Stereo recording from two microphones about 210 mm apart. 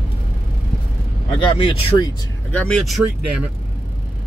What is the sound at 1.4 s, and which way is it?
Speech, 25° left (ahead or behind).